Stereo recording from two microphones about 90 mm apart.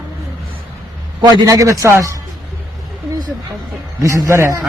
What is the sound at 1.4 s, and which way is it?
Speech, 35° right (ahead or behind).